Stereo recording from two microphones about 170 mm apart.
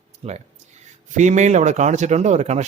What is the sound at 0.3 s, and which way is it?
Speech, 40° right (ahead or behind).